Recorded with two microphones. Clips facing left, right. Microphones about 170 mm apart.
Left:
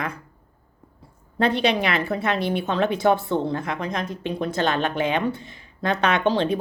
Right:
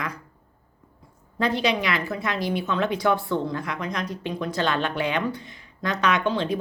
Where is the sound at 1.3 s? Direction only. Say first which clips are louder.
Left 3 dB; 60° left (ahead or behind).